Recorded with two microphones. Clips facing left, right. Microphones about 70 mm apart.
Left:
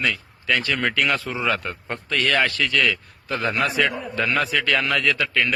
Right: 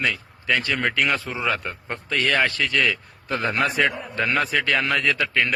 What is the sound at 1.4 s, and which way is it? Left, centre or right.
A man's voice, centre.